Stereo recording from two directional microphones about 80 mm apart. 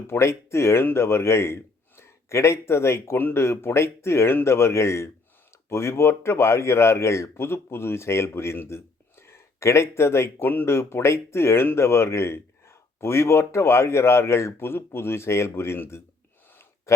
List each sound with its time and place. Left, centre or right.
0.1 s speech: left